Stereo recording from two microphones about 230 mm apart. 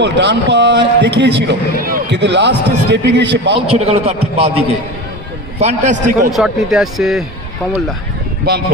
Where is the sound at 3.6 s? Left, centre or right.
Right.